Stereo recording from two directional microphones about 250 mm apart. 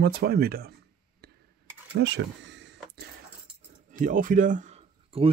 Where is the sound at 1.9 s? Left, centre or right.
Right.